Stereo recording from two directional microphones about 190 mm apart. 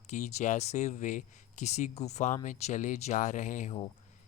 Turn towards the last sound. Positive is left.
turn(degrees=35)  # may be behind; listen again after turning